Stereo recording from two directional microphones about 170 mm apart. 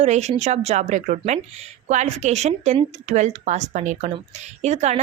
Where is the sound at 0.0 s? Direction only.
40° right (ahead or behind).